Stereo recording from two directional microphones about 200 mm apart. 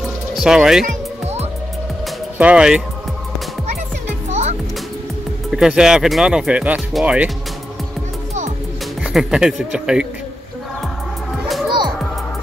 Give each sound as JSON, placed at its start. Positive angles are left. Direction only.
{"t": 0.3, "sound": "speech", "side_deg": 0}
{"t": 0.8, "sound": "music", "side_deg": -35}
{"t": 2.3, "sound": "speech", "side_deg": -5}
{"t": 4.3, "sound": "music", "side_deg": -35}
{"t": 5.5, "sound": "speech", "side_deg": -5}
{"t": 9.0, "sound": "speech", "side_deg": -5}
{"t": 11.4, "sound": "music", "side_deg": 0}